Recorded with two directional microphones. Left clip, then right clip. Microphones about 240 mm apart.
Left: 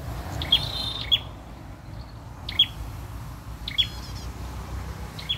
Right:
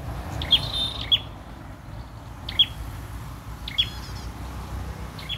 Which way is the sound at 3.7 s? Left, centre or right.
Centre.